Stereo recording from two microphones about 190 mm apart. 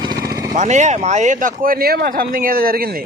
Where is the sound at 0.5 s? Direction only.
40° right (ahead or behind).